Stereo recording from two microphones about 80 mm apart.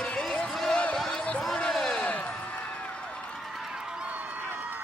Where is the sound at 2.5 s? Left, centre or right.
Centre.